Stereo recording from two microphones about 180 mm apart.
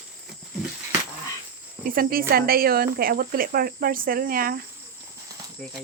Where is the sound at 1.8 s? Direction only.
55° right (ahead or behind).